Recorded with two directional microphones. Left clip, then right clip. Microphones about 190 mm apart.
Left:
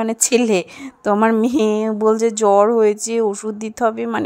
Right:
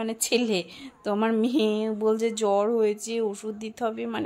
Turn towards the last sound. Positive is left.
turn(degrees=35)  # may be behind; listen again after turning